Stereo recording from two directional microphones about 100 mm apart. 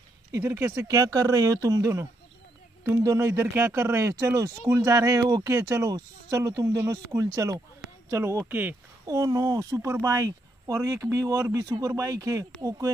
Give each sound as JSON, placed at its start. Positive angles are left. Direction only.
{"t": 0.3, "sound": "speech", "side_deg": -25}
{"t": 0.8, "sound": "speech", "side_deg": -35}
{"t": 9.0, "sound": "speech", "side_deg": -35}